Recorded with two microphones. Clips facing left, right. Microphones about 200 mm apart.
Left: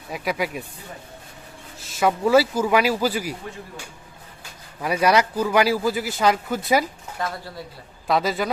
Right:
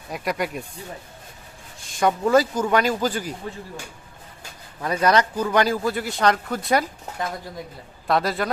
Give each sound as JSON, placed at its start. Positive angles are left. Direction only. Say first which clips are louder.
{"t": 0.1, "sound": "speech", "louder": "even", "side_deg": 0}
{"t": 1.8, "sound": "speech", "louder": "even", "side_deg": 5}
{"t": 4.8, "sound": "speech", "louder": "left 1 dB", "side_deg": 10}
{"t": 7.2, "sound": "speech", "louder": "even", "side_deg": -15}
{"t": 8.0, "sound": "speech", "louder": "even", "side_deg": 0}